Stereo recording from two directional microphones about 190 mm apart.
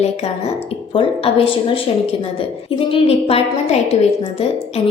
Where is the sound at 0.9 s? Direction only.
30° left (ahead or behind).